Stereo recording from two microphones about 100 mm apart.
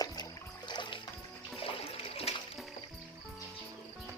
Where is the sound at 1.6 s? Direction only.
70° left (ahead or behind).